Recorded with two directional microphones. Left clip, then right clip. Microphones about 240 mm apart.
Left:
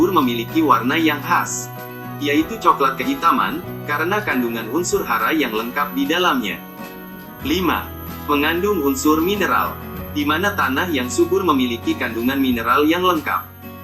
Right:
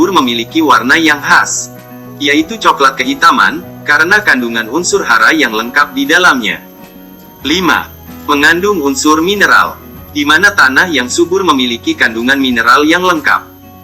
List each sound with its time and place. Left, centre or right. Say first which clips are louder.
0.0 s speech: right 7 dB; right